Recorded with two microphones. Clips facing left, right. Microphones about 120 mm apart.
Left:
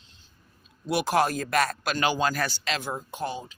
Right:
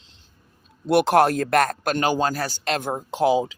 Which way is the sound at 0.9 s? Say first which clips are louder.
Right 7 dB; 60° right (ahead or behind).